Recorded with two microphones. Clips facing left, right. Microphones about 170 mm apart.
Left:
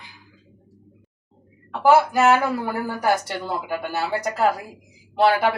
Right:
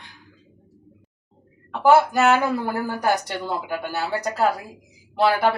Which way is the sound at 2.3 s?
15° right (ahead or behind).